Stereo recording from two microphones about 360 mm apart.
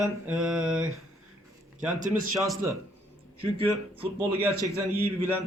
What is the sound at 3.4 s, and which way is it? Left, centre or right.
A man's voice, centre.